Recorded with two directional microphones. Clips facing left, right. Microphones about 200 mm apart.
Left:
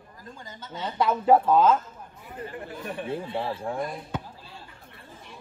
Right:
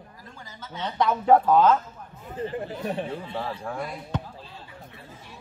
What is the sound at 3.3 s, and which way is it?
Speech, 20° left (ahead or behind).